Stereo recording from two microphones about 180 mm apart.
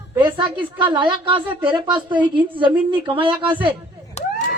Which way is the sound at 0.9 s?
25° right (ahead or behind).